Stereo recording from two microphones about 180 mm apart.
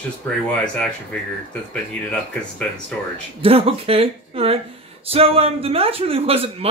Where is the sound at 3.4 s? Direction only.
30° right (ahead or behind).